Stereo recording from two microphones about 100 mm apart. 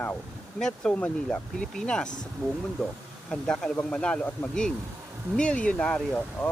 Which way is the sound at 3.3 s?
5° left (ahead or behind).